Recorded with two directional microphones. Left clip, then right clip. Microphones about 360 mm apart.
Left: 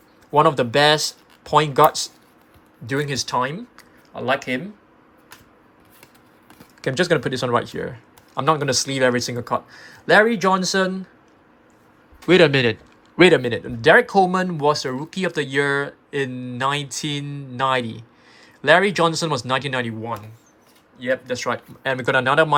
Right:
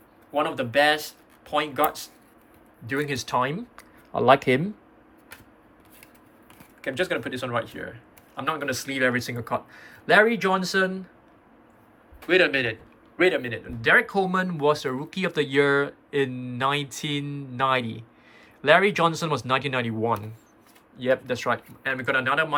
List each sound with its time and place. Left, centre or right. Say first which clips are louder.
0.3 s speech: left 7 dB; centre
6.8 s speech: left 7 dB; centre
12.3 s a man's voice: left 6 dB; left